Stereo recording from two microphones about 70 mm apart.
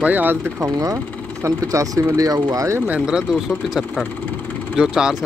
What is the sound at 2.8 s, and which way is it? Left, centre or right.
Speech, centre.